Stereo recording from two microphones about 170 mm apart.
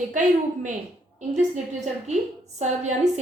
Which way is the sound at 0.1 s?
50° right (ahead or behind).